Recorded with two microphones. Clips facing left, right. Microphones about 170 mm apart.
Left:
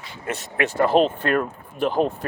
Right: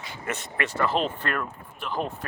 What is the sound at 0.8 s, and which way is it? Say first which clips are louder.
Speech: left 8 dB; 55° left (ahead or behind).